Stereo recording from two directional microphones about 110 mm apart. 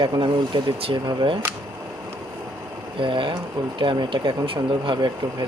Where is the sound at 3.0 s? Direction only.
50° right (ahead or behind).